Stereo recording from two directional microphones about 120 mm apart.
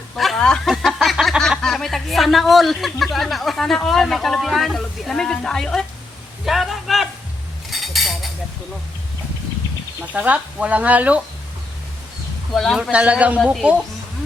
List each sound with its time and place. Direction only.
0.2 s speech: centre (ahead or behind)
6.4 s a sound: centre (ahead or behind)
7.7 s cutlery: centre (ahead or behind)
10.1 s speech: 10° right (ahead or behind)
12.5 s speech: 5° left (ahead or behind)
12.9 s speech: 10° right (ahead or behind)